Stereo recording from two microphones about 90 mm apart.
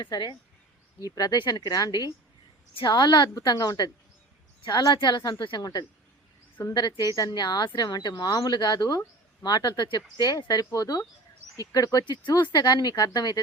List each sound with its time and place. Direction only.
0.0 s a woman's voice: 55° left (ahead or behind)
0.9 s a woman's voice: 45° left (ahead or behind)
3.3 s a woman's voice: 45° left (ahead or behind)
12.0 s a woman's voice: 60° left (ahead or behind)